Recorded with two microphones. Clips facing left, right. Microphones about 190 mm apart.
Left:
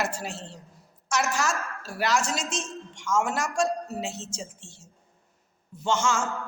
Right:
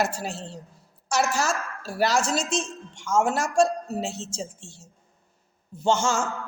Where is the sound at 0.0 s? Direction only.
35° right (ahead or behind).